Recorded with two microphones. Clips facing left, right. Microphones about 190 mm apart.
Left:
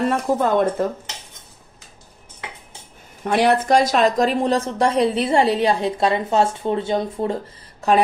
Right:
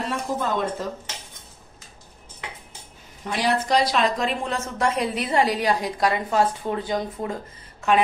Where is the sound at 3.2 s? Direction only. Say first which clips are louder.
Left 7 dB; 60° left (ahead or behind).